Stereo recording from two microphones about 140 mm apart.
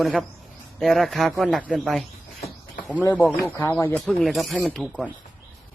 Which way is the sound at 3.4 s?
20° left (ahead or behind).